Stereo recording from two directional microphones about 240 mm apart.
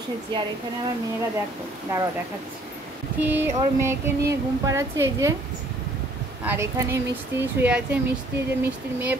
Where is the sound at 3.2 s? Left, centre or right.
Centre.